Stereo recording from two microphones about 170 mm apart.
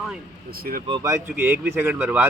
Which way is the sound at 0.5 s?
60° right (ahead or behind).